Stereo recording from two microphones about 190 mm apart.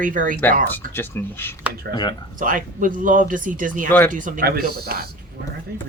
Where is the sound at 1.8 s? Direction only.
60° right (ahead or behind).